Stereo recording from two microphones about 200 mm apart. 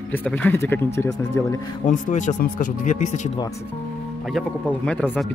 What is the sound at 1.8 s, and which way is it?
Speech, 35° left (ahead or behind).